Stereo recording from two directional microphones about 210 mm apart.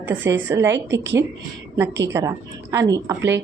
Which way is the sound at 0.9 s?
60° right (ahead or behind).